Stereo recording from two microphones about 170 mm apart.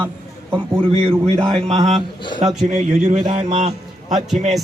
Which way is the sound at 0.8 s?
35° right (ahead or behind).